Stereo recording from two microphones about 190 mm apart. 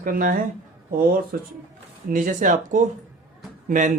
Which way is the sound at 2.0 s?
45° right (ahead or behind).